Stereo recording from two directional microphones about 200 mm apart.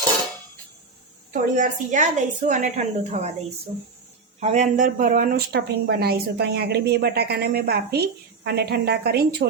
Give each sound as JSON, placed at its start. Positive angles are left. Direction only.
{"t": 1.3, "sound": "a woman's voice", "side_deg": -40}
{"t": 4.4, "sound": "a woman's voice", "side_deg": -35}